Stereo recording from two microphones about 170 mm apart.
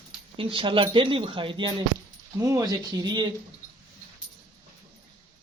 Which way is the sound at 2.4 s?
20° right (ahead or behind).